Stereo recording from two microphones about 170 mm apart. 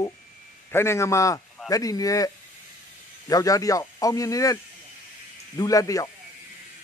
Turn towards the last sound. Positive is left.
turn(degrees=20)  # may be behind; listen again after turning